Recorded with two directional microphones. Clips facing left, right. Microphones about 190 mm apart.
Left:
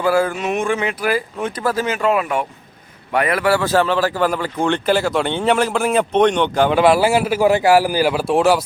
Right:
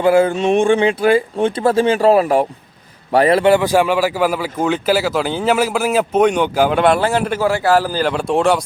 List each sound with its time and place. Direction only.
0.0 s a man's voice: 25° right (ahead or behind); by 8.6 s 5° left (ahead or behind)